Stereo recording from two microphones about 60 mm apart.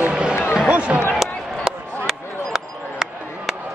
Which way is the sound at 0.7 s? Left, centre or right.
Right.